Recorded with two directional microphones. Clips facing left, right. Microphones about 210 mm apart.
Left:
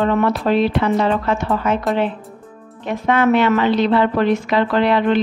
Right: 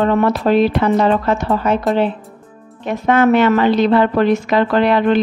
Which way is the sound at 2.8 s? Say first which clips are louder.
Right 3 dB; 45° right (ahead or behind).